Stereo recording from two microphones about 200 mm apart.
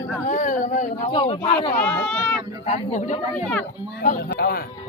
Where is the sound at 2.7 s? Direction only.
35° left (ahead or behind).